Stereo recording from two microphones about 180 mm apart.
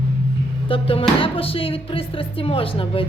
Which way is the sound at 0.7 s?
30° left (ahead or behind).